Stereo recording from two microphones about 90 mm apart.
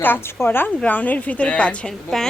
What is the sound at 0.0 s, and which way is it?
A woman's voice, 25° left (ahead or behind).